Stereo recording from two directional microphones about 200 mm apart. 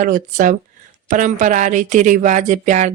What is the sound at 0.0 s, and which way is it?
Speech, 40° right (ahead or behind).